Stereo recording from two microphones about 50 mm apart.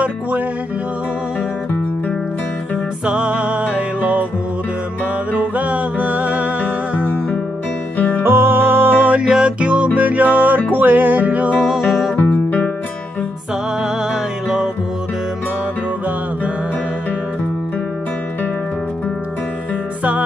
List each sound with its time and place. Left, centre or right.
3.1 s music: right
5.3 s music: right
8.2 s music: right
9.2 s music: centre
11.6 s music: centre
12.2 s music: left
20.0 s music: right